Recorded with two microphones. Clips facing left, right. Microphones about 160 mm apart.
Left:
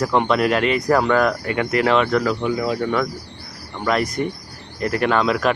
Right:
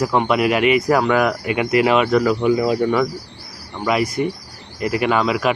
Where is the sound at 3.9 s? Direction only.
5° right (ahead or behind).